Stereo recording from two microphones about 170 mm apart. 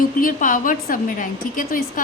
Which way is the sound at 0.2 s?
55° left (ahead or behind).